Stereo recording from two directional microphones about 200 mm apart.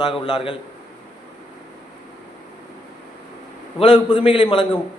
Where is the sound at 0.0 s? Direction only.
20° left (ahead or behind).